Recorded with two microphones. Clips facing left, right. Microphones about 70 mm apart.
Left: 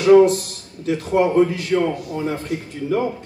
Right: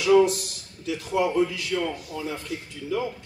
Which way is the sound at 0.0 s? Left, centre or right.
Left.